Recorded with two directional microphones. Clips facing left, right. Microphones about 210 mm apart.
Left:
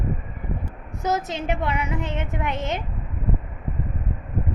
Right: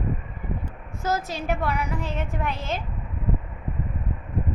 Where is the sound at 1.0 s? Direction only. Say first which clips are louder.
Left 2 dB; 20° left (ahead or behind).